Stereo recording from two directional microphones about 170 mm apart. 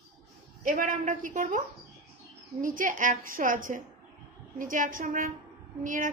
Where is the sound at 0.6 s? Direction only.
50° right (ahead or behind).